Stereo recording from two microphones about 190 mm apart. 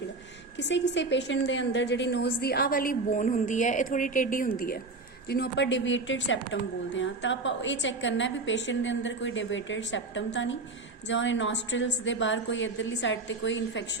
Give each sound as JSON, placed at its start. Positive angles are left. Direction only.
{"t": 0.5, "sound": "a woman's voice", "side_deg": 70}
{"t": 5.3, "sound": "a woman's voice", "side_deg": 60}